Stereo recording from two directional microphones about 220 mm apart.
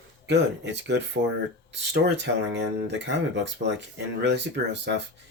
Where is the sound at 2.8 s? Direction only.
55° right (ahead or behind).